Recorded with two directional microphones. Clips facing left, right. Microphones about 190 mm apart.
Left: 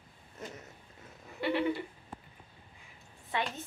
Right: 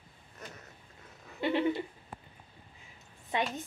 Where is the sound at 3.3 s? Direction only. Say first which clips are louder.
Right 2 dB; 15° right (ahead or behind).